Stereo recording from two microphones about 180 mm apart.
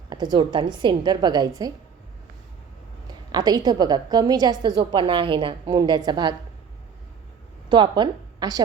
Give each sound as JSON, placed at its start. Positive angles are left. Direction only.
{"t": 0.1, "sound": "a woman's voice", "side_deg": -25}
{"t": 3.3, "sound": "a woman's voice", "side_deg": -20}
{"t": 7.7, "sound": "a woman's voice", "side_deg": -25}